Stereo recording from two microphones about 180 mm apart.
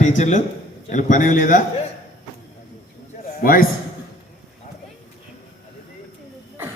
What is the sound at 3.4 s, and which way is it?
Speech, 55° left (ahead or behind).